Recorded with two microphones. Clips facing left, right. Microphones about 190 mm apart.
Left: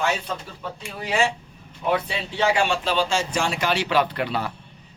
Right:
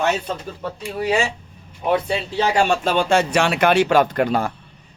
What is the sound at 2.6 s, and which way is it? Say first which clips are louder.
Speech: right 4 dB; 45° right (ahead or behind).